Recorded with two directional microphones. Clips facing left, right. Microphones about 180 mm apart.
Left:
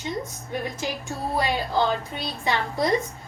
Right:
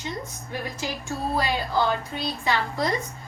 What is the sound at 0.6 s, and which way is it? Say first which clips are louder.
Music: left 2 dB; 20° left (ahead or behind).